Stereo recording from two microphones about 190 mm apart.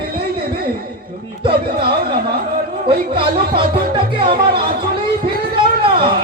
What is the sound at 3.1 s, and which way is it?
Speech, 25° right (ahead or behind).